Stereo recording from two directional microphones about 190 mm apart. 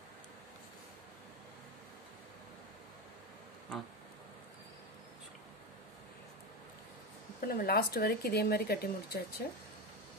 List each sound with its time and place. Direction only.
7.3 s speech: 50° left (ahead or behind)